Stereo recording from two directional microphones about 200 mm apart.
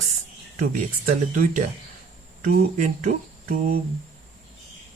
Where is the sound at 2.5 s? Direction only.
40° right (ahead or behind).